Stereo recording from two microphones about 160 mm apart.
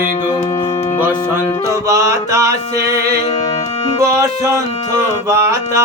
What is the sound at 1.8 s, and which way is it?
Music, 20° right (ahead or behind).